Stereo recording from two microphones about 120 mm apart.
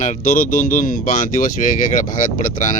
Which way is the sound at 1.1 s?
90° left.